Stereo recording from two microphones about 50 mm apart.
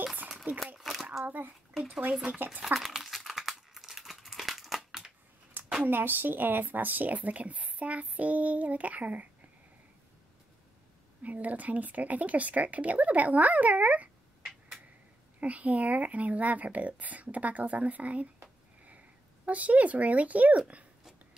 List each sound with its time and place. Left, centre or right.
0.0 s a sound: right
0.7 s a sound: centre
1.2 s speech: right
1.7 s speech: centre
2.3 s speech: right
2.6 s crumpling: centre
5.5 s a sound: right
5.9 s speech: right
11.2 s speech: right
15.4 s speech: right